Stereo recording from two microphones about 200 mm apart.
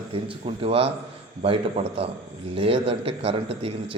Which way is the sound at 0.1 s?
30° right (ahead or behind).